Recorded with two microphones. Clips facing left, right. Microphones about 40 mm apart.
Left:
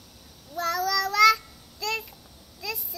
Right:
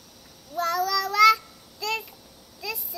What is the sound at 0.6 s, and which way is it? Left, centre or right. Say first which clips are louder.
Child singing: right 1 dB; centre.